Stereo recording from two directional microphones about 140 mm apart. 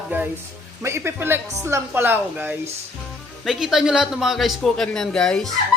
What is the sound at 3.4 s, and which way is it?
A man's voice, centre (ahead or behind).